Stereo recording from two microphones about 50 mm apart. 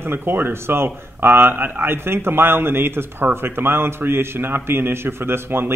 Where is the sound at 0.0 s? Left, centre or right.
Right.